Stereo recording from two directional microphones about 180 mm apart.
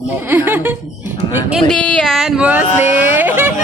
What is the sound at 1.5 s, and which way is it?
Speech, 5° left (ahead or behind).